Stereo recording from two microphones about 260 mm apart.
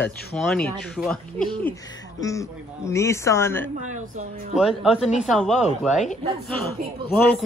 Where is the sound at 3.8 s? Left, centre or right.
Right.